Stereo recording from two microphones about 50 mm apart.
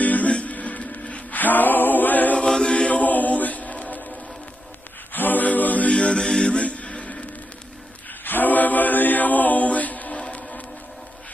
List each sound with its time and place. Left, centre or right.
0.0 s music: left
5.1 s a capella: left; by 6.6 s centre
6.6 s music: left
8.2 s a capella: left
10.2 s music: centre